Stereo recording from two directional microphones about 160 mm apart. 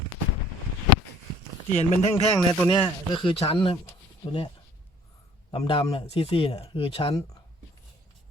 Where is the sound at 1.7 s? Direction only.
45° left (ahead or behind).